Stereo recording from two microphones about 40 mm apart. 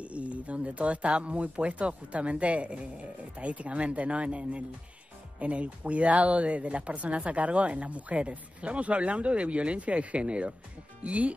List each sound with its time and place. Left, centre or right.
0.0 s speech: right